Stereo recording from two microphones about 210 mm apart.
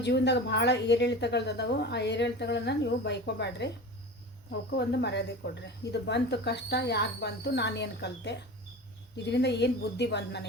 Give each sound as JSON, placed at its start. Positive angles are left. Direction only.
{"t": 0.0, "sound": "a woman's voice", "side_deg": 55}
{"t": 4.7, "sound": "a woman's voice", "side_deg": 55}